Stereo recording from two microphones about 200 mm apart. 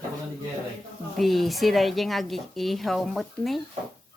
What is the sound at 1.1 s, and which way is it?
A woman's voice, centre (ahead or behind).